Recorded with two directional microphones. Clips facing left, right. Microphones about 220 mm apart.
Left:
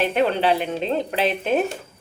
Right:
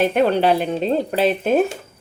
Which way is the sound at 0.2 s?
40° right (ahead or behind).